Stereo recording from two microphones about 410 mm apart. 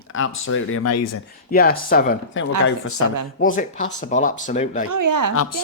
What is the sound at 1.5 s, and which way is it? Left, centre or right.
Speech, left.